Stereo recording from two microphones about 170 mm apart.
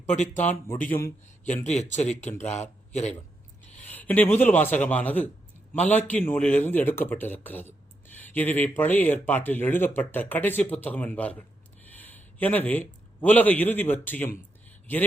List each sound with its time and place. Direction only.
0.0 s speech: 45° left (ahead or behind)
1.6 s speech: 45° left (ahead or behind)
3.8 s a man's voice: 10° left (ahead or behind)